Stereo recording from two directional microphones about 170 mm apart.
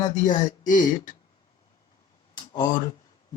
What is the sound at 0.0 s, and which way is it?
Speech, 50° left (ahead or behind).